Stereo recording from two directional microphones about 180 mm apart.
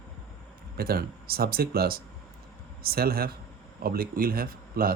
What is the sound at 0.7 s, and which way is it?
Speech, 55° right (ahead or behind).